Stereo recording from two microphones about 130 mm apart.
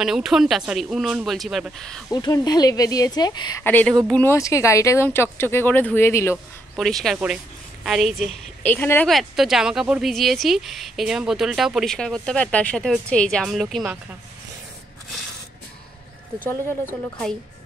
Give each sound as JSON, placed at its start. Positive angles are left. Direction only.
{"t": 0.0, "sound": "speech", "side_deg": -5}
{"t": 2.0, "sound": "speech", "side_deg": 30}
{"t": 3.6, "sound": "speech", "side_deg": 15}
{"t": 6.8, "sound": "speech", "side_deg": 0}
{"t": 8.6, "sound": "speech", "side_deg": 15}
{"t": 9.0, "sound": "speech", "side_deg": 0}